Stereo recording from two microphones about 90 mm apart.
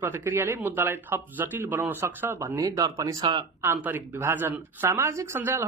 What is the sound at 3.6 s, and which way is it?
Speech, 25° right (ahead or behind).